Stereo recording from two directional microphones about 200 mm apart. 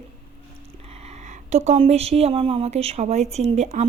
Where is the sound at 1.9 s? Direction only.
30° right (ahead or behind).